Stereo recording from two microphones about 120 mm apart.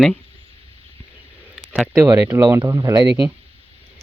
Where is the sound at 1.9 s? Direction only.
25° right (ahead or behind).